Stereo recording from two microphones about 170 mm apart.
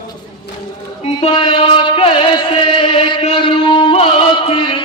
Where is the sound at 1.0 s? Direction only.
35° left (ahead or behind).